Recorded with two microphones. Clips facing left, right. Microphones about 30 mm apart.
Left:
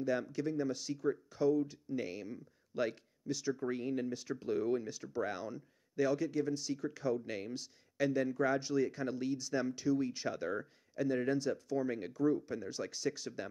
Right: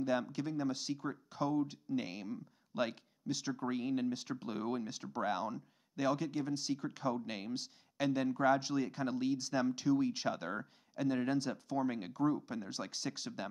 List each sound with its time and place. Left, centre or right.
0.0 s speech: right